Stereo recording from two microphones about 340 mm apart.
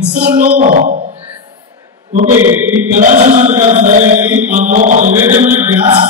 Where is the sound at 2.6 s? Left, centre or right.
Centre.